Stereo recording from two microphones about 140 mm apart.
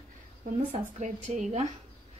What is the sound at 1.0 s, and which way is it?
Speech, 60° right (ahead or behind).